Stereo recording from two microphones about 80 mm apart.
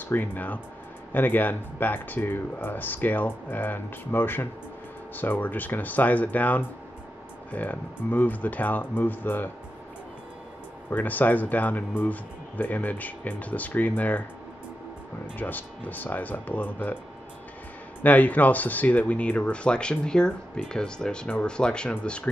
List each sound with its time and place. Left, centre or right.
0.0 s speech: left
10.9 s speech: left
15.3 s speech: left
18.0 s speech: left